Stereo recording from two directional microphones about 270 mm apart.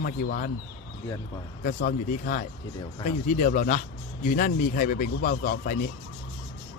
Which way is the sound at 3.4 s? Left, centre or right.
Left.